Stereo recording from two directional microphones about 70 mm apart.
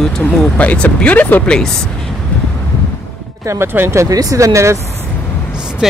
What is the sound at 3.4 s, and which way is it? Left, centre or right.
Speech, right.